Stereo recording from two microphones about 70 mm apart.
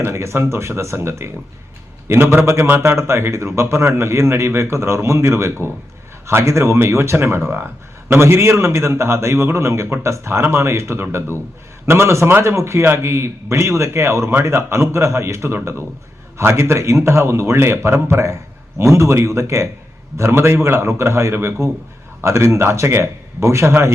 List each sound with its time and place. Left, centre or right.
0.0 s speech: right